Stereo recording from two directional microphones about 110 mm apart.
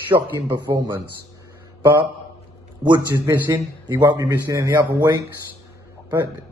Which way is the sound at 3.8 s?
40° right (ahead or behind).